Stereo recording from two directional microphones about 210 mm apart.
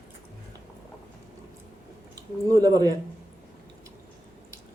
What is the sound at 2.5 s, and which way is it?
Speech, 15° right (ahead or behind).